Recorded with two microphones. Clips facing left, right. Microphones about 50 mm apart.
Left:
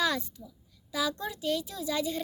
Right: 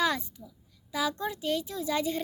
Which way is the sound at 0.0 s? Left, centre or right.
Right.